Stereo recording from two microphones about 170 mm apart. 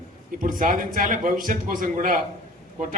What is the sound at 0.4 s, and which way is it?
A man's voice, 55° right (ahead or behind).